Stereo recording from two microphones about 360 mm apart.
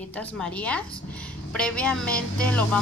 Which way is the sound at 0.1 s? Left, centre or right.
Centre.